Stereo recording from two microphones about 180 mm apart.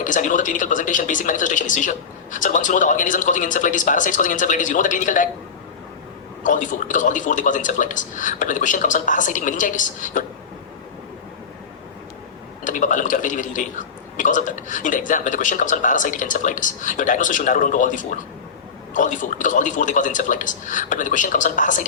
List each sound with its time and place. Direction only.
0.0 s a man's voice: 45° left (ahead or behind)
6.4 s a man's voice: 45° left (ahead or behind)
12.6 s a man's voice: 45° left (ahead or behind)